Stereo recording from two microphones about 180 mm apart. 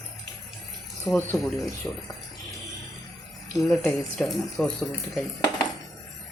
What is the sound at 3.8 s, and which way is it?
Speech, centre (ahead or behind).